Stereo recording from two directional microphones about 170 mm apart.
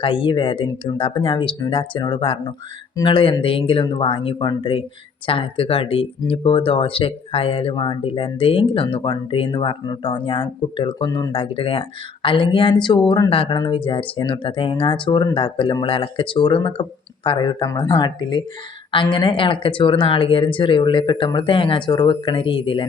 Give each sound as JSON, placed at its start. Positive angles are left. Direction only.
{"t": 0.0, "sound": "speech", "side_deg": 30}